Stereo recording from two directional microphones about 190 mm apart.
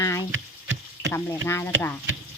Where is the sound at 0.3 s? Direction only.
75° right (ahead or behind).